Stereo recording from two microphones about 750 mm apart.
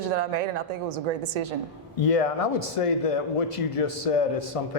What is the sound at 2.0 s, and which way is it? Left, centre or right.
Speech, left.